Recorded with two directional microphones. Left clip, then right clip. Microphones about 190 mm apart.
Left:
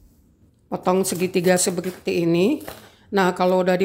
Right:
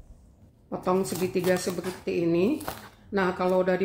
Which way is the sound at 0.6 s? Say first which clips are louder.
Left 6 dB; 50° left (ahead or behind).